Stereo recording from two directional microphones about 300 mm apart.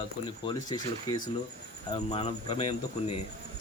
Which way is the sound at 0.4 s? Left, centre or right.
Centre.